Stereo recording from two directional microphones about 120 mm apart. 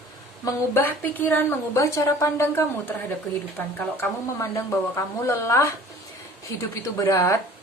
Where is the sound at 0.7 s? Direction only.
15° left (ahead or behind).